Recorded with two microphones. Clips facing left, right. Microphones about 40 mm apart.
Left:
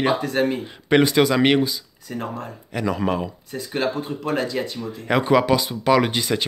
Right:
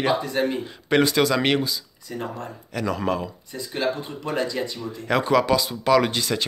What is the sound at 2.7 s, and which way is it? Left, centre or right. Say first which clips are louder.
Speech: left 2 dB; centre.